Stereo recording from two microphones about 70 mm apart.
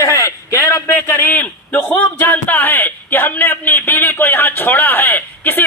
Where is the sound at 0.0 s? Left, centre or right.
Left.